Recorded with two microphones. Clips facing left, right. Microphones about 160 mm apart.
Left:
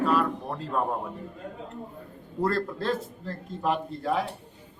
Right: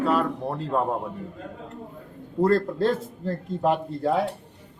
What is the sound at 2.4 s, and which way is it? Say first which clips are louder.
A man's voice: right 6 dB; 40° right (ahead or behind).